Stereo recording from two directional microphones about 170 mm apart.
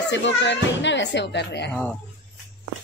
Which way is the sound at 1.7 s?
10° left (ahead or behind).